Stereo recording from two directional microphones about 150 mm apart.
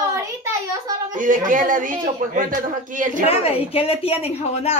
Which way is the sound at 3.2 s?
40° left (ahead or behind).